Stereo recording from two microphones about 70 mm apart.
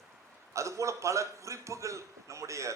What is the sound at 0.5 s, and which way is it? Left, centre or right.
A man's voice, right.